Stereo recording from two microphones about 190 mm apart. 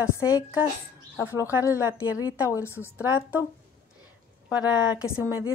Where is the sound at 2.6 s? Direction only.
15° left (ahead or behind).